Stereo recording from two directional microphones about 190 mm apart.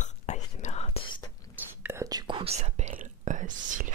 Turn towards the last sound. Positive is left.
turn(degrees=-45)  # may be behind; listen again after turning